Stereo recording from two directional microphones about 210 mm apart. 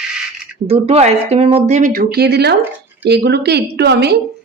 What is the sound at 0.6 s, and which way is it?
Speech, 30° right (ahead or behind).